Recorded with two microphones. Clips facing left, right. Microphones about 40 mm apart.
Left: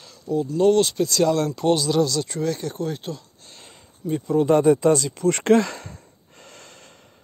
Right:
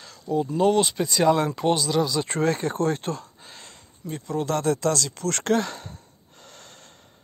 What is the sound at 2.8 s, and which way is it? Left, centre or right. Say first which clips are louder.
Speech: right 4 dB; right.